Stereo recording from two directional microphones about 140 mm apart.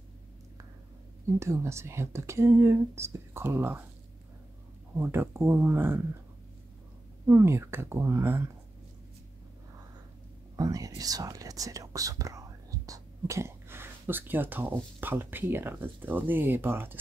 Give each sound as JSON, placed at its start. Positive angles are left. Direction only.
{"t": 1.4, "sound": "speech", "side_deg": -20}
{"t": 4.9, "sound": "speech", "side_deg": -15}
{"t": 7.2, "sound": "speech", "side_deg": -20}
{"t": 10.5, "sound": "speech", "side_deg": -25}